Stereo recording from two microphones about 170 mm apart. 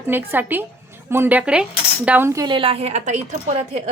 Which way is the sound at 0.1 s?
10° right (ahead or behind).